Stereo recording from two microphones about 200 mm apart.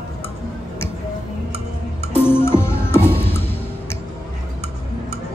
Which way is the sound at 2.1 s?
10° left (ahead or behind).